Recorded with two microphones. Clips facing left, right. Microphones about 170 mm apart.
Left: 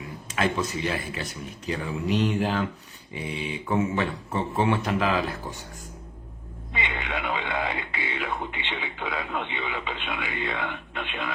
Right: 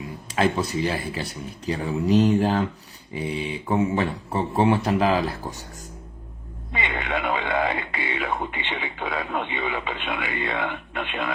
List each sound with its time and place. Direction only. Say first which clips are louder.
0.3 s speech: right 4 dB; 35° right (ahead or behind)
6.7 s speech: right 4 dB; 55° right (ahead or behind)